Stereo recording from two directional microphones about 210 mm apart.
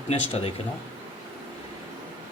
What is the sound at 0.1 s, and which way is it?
Speech, 30° left (ahead or behind).